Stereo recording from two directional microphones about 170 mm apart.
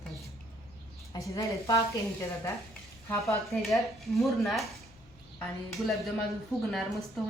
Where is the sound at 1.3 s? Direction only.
20° left (ahead or behind).